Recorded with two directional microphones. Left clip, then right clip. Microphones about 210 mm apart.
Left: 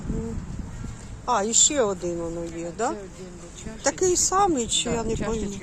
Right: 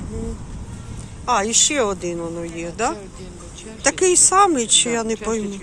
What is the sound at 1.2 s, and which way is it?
Speech, 15° left (ahead or behind).